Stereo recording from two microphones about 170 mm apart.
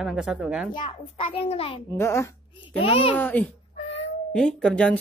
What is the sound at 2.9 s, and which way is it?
Speech, 35° left (ahead or behind).